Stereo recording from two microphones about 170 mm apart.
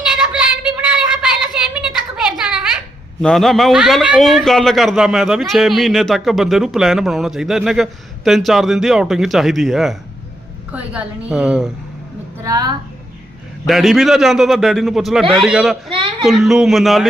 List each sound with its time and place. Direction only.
0.0 s child singing: 5° right (ahead or behind)
2.4 s a sound: 5° right (ahead or behind)
3.2 s a man's voice: centre (ahead or behind)
12.4 s a woman's voice: 20° right (ahead or behind)
13.7 s a man's voice: centre (ahead or behind)
15.9 s a woman's voice: 30° right (ahead or behind)
16.2 s a man's voice: centre (ahead or behind)